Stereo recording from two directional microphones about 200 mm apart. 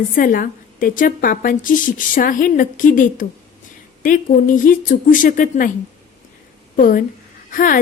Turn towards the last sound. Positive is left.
turn(degrees=45)  # may be behind; listen again after turning